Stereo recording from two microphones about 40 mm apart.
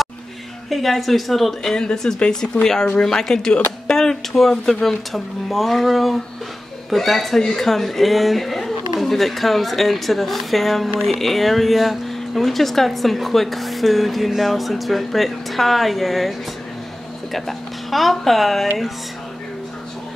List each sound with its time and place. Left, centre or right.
0.7 s speech: centre
1.9 s speech: left
2.6 s speech: centre